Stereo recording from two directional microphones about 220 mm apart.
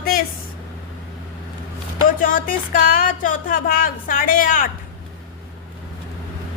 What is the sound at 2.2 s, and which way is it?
Music, 40° left (ahead or behind).